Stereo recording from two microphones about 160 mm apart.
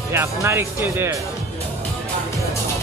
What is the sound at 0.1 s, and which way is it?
Speech, 15° right (ahead or behind).